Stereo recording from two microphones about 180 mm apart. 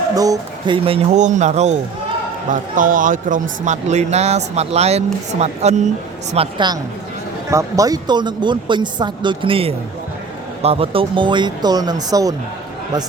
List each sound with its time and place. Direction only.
0.1 s speech: 20° right (ahead or behind)
0.9 s a man's voice: 35° right (ahead or behind)
6.3 s speech: 30° right (ahead or behind)